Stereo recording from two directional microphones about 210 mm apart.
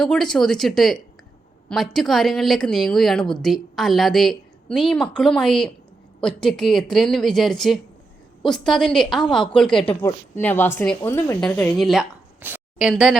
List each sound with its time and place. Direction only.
0.0 s a woman's voice: centre (ahead or behind)